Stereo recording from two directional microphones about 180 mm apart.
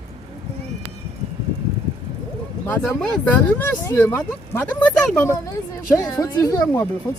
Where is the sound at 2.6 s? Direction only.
5° left (ahead or behind).